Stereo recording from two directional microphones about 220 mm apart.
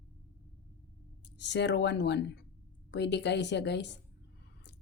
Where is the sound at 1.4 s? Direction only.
50° left (ahead or behind).